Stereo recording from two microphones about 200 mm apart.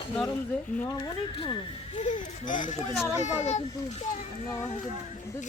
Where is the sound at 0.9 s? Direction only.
20° left (ahead or behind).